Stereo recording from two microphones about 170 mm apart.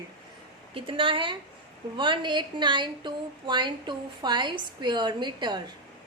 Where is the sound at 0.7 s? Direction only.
30° right (ahead or behind).